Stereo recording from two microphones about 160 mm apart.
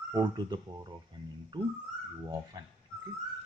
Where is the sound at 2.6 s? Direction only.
25° right (ahead or behind).